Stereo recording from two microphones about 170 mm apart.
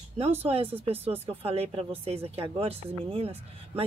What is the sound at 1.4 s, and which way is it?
Speech, 35° right (ahead or behind).